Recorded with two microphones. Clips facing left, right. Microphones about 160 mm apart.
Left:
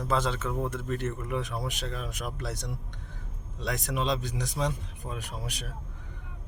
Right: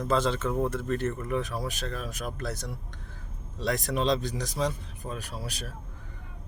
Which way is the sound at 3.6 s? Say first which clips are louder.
Right 3 dB; 10° left (ahead or behind).